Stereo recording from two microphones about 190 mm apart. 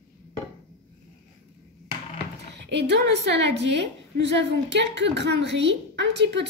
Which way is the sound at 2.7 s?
65° right (ahead or behind).